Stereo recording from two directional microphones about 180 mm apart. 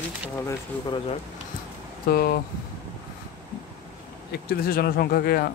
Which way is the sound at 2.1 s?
55° left (ahead or behind).